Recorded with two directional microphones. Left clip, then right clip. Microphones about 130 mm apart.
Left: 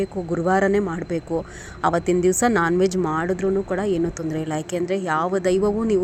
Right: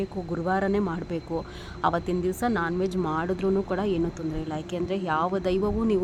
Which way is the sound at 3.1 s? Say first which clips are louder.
Left 4 dB; 15° left (ahead or behind).